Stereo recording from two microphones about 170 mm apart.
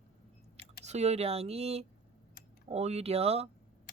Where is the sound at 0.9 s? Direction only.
40° right (ahead or behind).